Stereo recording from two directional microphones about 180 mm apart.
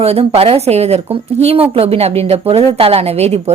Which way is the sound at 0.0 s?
35° right (ahead or behind).